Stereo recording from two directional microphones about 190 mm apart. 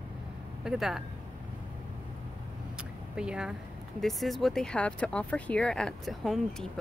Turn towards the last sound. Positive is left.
turn(degrees=0)  # may be behind; listen again after turning